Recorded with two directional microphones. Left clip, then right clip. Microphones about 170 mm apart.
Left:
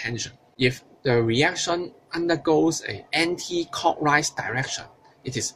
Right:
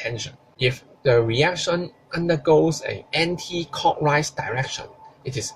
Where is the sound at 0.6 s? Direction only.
55° left (ahead or behind).